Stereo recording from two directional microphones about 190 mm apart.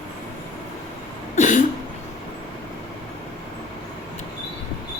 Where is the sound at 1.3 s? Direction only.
40° left (ahead or behind).